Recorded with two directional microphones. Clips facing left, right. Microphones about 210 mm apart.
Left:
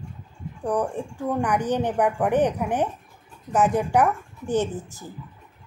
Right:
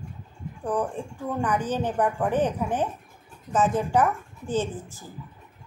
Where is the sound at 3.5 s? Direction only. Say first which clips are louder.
Left 2 dB; 15° left (ahead or behind).